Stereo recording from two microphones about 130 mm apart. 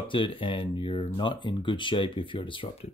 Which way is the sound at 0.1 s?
40° left (ahead or behind).